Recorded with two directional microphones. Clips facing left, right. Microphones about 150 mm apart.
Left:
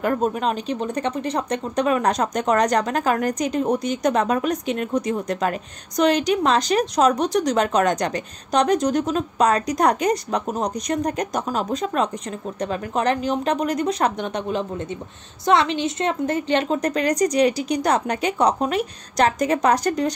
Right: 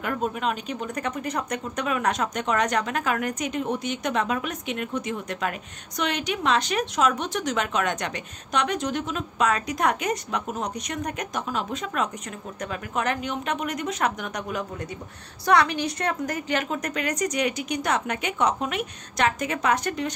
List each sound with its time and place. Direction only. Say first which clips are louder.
0.0 s speech: left 6 dB; 40° left (ahead or behind)